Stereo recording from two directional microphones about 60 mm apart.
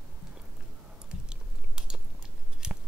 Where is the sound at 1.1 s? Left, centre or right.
Centre.